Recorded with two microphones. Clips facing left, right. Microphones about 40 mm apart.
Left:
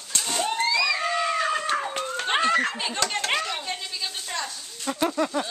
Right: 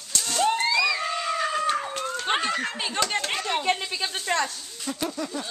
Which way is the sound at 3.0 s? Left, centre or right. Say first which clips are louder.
Right 2 dB; centre.